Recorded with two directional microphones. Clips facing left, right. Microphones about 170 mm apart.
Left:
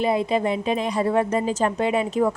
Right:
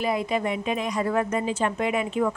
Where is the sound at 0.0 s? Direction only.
25° left (ahead or behind).